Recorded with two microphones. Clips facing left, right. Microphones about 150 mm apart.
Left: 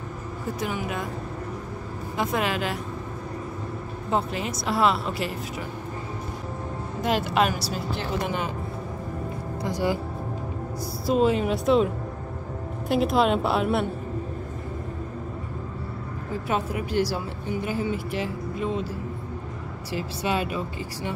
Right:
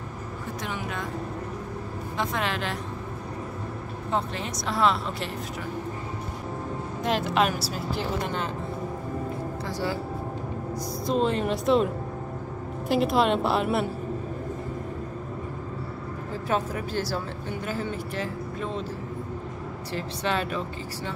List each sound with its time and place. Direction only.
0.6 s speech: 5° left (ahead or behind)
2.1 s speech: 5° left (ahead or behind)
4.1 s speech: 5° left (ahead or behind)
7.0 s speech: 5° left (ahead or behind)
9.7 s speech: 15° left (ahead or behind)
11.1 s speech: 5° left (ahead or behind)
16.4 s speech: 15° left (ahead or behind)
19.9 s speech: 10° left (ahead or behind)